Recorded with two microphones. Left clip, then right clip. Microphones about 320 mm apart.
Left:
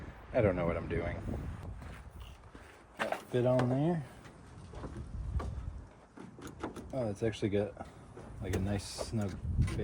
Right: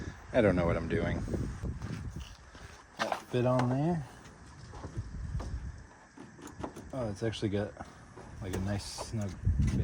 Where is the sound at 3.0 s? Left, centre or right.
Centre.